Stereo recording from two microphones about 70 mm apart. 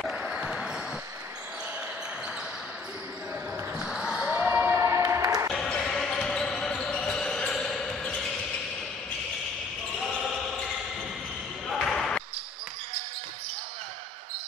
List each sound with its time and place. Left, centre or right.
0.1 s basketball bounce: centre
3.7 s basketball bounce: centre
4.5 s a sound: right
4.7 s a sound: right
5.5 s basketball bounce: centre
9.9 s basketball bounce: centre
11.6 s basketball bounce: centre